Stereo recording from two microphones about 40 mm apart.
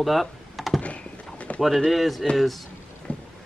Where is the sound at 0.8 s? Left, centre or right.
Left.